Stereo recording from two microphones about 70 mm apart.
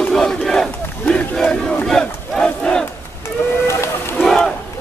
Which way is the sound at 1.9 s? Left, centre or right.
Centre.